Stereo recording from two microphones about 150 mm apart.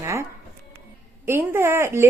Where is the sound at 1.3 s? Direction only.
15° right (ahead or behind).